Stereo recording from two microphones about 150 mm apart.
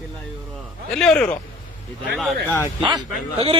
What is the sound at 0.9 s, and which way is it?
Speech, 5° left (ahead or behind).